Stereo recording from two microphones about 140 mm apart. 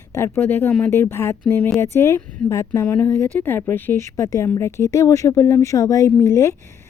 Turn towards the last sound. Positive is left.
turn(degrees=20)  # may be behind; listen again after turning